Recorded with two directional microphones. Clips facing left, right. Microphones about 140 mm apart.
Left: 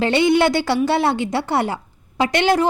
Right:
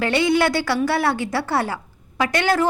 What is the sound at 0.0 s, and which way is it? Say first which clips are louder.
A woman's voice: left 3 dB; 25° left (ahead or behind).